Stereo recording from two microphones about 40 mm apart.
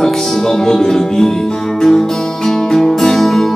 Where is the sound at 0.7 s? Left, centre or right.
Centre.